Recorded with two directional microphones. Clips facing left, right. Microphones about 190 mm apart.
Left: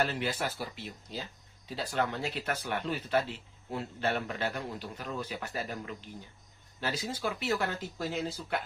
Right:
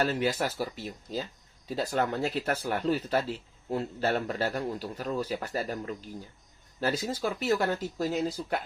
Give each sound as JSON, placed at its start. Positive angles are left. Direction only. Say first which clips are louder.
{"t": 0.0, "sound": "speech", "louder": "right 4 dB", "side_deg": -45}